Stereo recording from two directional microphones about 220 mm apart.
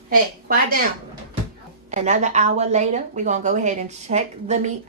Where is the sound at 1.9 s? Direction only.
35° right (ahead or behind).